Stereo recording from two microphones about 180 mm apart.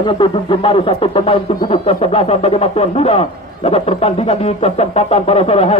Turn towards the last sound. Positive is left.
turn(degrees=35)  # may be behind; listen again after turning